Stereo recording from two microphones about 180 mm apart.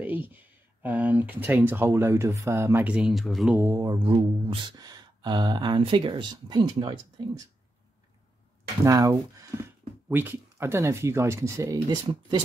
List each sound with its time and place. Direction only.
0.0 s speech: 10° right (ahead or behind)
3.6 s speech: 20° right (ahead or behind)
8.8 s speech: 20° right (ahead or behind)